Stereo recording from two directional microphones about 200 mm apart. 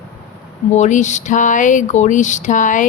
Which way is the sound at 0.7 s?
35° left (ahead or behind).